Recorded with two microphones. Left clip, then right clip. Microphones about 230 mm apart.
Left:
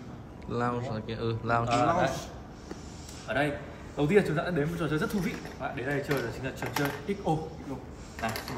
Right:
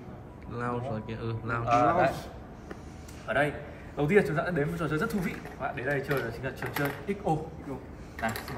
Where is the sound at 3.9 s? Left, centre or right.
Centre.